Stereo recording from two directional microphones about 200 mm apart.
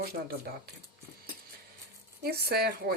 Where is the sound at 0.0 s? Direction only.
50° right (ahead or behind).